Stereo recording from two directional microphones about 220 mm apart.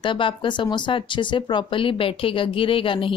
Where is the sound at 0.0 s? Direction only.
20° left (ahead or behind).